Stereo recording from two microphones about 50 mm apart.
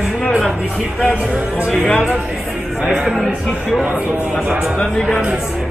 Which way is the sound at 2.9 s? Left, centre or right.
Centre.